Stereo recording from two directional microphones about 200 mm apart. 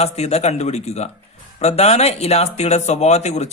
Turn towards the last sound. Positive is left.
turn(degrees=35)  # may be behind; listen again after turning